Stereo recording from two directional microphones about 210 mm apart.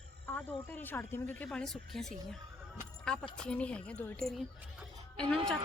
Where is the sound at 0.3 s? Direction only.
10° left (ahead or behind).